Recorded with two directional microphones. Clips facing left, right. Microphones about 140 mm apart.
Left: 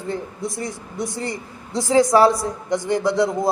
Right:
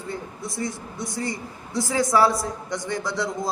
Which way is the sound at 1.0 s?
15° right (ahead or behind).